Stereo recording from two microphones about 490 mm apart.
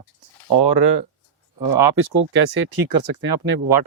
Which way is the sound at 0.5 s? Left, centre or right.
Right.